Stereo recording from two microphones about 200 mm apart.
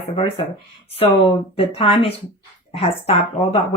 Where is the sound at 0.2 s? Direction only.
30° left (ahead or behind).